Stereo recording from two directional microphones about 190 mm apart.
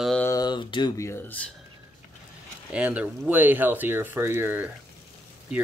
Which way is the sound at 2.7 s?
5° right (ahead or behind).